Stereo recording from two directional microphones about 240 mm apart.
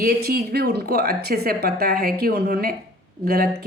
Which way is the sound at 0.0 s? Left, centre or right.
Right.